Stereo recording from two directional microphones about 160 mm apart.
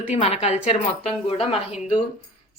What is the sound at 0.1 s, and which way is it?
A woman's voice, 45° left (ahead or behind).